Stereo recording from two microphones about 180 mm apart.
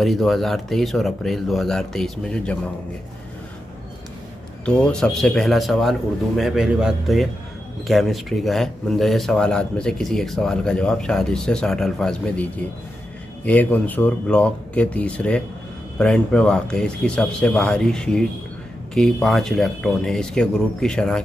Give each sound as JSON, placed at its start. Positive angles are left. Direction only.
{"t": 0.0, "sound": "speech", "side_deg": 0}
{"t": 4.6, "sound": "speech", "side_deg": 5}